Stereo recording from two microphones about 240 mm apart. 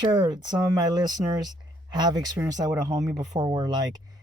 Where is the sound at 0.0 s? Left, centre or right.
Centre.